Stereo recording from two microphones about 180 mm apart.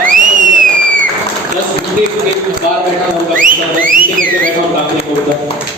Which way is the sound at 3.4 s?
50° right (ahead or behind).